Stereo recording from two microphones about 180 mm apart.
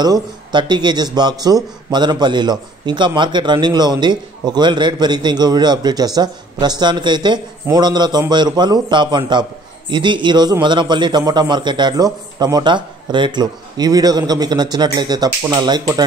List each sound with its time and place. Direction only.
0.0 s a man's voice: 25° right (ahead or behind)